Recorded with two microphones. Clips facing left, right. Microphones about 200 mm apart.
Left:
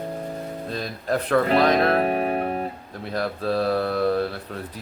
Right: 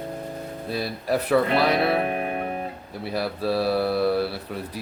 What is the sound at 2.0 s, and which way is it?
Music, 35° left (ahead or behind).